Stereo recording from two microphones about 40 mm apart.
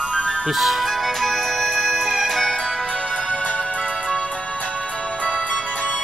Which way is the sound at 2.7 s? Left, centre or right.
Left.